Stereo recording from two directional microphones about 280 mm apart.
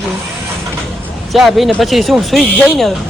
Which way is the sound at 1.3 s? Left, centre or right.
Centre.